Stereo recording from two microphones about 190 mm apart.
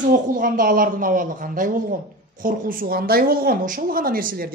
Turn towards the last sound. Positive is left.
turn(degrees=-50)  # may be behind; listen again after turning